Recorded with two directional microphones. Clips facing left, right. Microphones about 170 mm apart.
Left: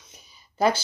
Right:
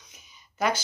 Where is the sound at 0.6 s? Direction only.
30° left (ahead or behind).